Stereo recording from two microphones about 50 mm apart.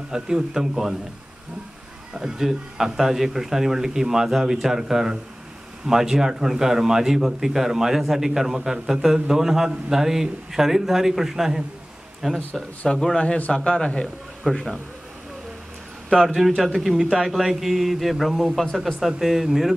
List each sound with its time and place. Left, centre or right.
0.1 s a man's voice: centre
2.1 s a man's voice: centre
12.8 s speech: centre
14.4 s speech: centre
16.3 s speech: centre